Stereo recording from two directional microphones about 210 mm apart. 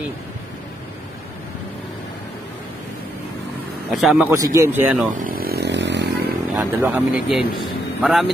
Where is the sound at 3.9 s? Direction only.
Centre (ahead or behind).